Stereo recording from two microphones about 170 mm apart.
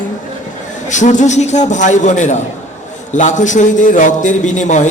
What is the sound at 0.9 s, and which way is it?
A man's voice, 45° left (ahead or behind).